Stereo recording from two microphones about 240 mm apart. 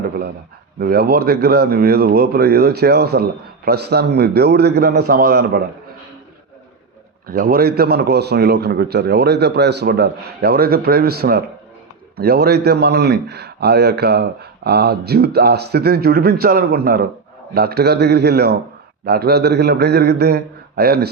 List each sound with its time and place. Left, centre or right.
0.8 s a man's voice: right
7.3 s a man's voice: right